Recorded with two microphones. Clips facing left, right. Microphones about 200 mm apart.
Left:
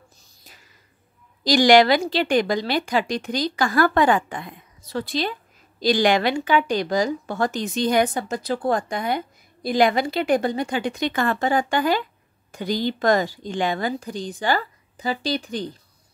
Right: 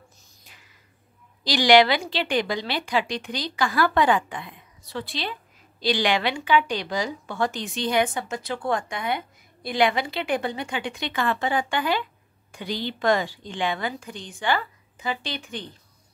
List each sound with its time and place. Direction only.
0.4 s whispering: 40° left (ahead or behind)
1.4 s a woman's voice: 45° left (ahead or behind)